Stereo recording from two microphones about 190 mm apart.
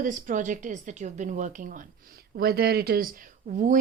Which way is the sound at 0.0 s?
40° right (ahead or behind).